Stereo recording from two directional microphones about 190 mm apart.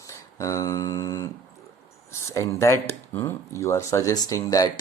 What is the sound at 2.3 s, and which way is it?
Speech, 15° left (ahead or behind).